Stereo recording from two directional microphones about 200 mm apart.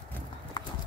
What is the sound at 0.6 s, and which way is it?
Clip-clop, 20° left (ahead or behind).